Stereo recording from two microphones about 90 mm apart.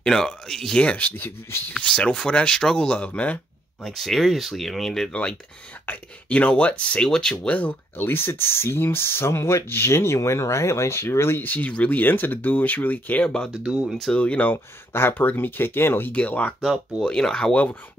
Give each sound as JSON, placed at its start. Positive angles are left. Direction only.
{"t": 0.0, "sound": "speech", "side_deg": 5}
{"t": 1.8, "sound": "speech", "side_deg": 10}
{"t": 3.8, "sound": "speech", "side_deg": 0}
{"t": 5.9, "sound": "speech", "side_deg": 15}
{"t": 7.5, "sound": "speech", "side_deg": 20}
{"t": 13.6, "sound": "speech", "side_deg": -10}
{"t": 13.8, "sound": "speech", "side_deg": 5}